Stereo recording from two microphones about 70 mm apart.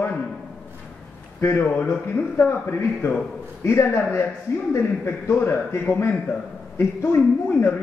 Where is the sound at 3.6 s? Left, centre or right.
Left.